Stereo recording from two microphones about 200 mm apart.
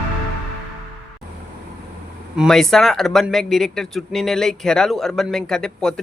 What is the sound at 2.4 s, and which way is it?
Speech, centre (ahead or behind).